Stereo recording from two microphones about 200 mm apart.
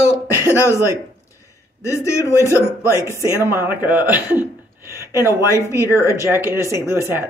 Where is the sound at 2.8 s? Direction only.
15° right (ahead or behind).